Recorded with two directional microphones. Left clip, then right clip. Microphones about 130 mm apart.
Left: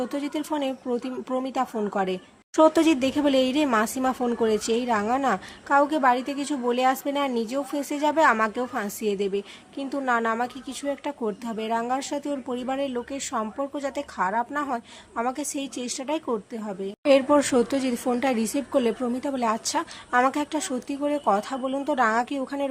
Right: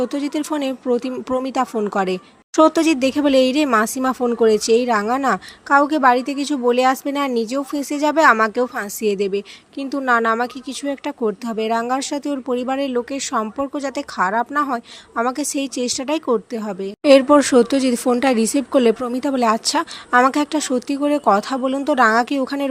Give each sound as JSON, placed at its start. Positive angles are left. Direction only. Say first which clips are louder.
{"t": 0.0, "sound": "speech", "louder": "right 7 dB", "side_deg": -35}